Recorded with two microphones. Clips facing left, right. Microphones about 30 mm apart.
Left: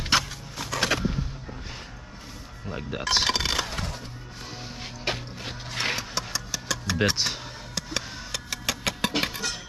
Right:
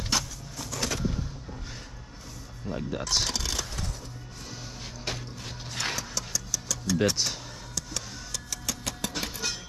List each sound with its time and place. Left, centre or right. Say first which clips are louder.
0.1 s a sound: left 6 dB; left
2.6 s speech: left 1 dB; left
3.3 s a sound: left 7 dB; left
5.0 s music: left 6 dB; left
7.3 s speech: left 4 dB; left
7.7 s music: left 5 dB; left